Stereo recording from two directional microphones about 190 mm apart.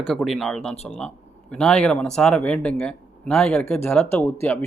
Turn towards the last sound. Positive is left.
turn(degrees=10)  # may be behind; listen again after turning